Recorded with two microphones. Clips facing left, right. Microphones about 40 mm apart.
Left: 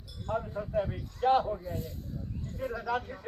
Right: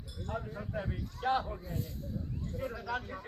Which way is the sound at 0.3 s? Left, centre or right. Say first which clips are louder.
Left 6 dB; centre.